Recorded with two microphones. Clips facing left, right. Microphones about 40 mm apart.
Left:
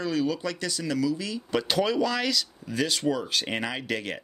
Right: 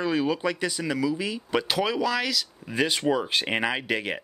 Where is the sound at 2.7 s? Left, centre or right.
Right.